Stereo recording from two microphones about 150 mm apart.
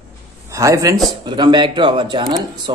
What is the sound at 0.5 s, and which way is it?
Speech, 20° right (ahead or behind).